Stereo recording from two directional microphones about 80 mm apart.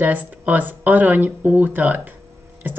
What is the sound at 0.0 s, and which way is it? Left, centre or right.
Speech, right.